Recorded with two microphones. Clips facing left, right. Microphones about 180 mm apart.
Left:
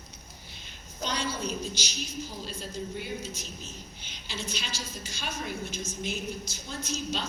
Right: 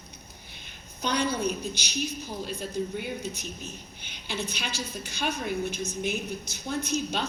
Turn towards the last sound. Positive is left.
turn(degrees=-60)  # may be behind; listen again after turning